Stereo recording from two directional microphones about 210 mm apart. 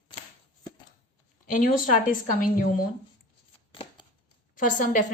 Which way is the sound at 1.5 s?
40° left (ahead or behind).